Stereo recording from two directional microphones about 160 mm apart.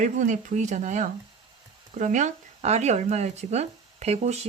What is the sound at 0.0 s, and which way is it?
Speech, 50° right (ahead or behind).